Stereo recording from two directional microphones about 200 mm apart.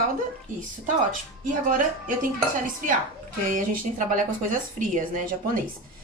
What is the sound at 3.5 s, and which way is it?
A woman's voice, 40° right (ahead or behind).